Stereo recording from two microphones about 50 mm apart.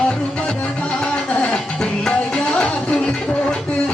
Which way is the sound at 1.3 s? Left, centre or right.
Left.